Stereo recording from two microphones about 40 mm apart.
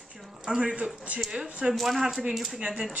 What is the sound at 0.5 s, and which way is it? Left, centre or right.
Speech, right.